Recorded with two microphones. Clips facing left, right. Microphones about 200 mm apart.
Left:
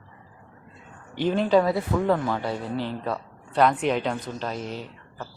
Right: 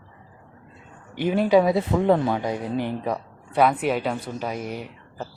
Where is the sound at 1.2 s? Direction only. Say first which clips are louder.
Right 2 dB; 10° right (ahead or behind).